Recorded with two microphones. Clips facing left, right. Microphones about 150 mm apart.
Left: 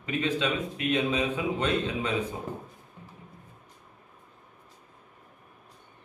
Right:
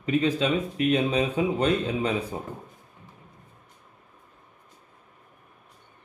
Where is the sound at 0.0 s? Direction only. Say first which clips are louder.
Right 5 dB; 35° right (ahead or behind).